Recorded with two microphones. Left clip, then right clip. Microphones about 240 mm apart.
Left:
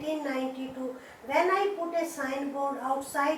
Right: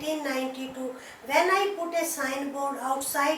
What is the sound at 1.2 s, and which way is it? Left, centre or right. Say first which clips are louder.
A woman's voice: right 2 dB; centre.